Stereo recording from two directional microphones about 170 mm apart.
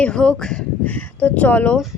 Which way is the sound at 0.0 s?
5° left (ahead or behind).